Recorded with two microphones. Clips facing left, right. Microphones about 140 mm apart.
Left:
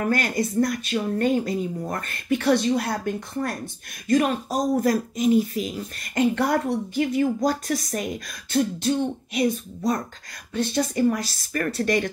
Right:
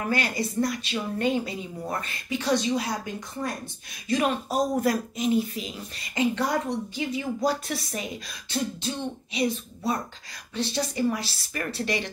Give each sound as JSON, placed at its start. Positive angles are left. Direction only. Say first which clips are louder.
{"t": 0.1, "sound": "speech", "louder": "left 4 dB", "side_deg": 45}
{"t": 4.1, "sound": "speech", "louder": "left 4 dB", "side_deg": 40}
{"t": 10.5, "sound": "speech", "louder": "left 5 dB", "side_deg": 50}